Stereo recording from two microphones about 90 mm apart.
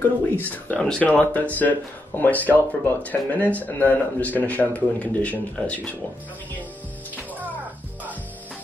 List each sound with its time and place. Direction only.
0.4 s speech: 15° left (ahead or behind)
7.2 s music: 20° right (ahead or behind)